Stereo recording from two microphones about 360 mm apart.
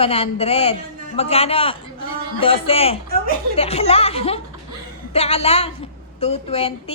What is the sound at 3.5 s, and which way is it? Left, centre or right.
A woman's voice, centre.